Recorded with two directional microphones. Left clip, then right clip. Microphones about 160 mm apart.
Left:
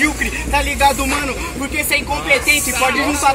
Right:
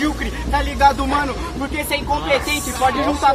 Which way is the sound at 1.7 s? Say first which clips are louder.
Left 3 dB; 15° left (ahead or behind).